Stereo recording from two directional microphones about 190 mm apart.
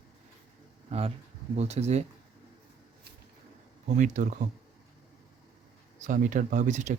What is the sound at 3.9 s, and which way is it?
Speech, 40° right (ahead or behind).